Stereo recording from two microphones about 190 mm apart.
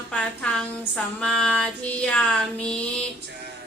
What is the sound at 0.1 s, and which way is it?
Female singing, 5° left (ahead or behind).